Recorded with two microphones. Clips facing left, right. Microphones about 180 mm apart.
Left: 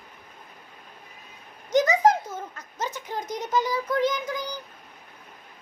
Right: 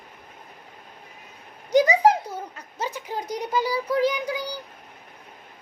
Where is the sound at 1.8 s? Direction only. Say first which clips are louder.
Right 1 dB; 10° right (ahead or behind).